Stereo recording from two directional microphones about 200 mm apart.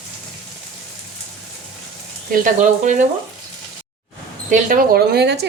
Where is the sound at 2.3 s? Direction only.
40° right (ahead or behind).